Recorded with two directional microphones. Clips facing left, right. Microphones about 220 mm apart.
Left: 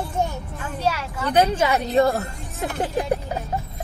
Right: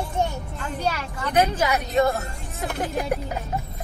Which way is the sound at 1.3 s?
30° left (ahead or behind).